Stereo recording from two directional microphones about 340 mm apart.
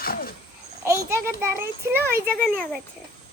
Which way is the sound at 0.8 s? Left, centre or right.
Centre.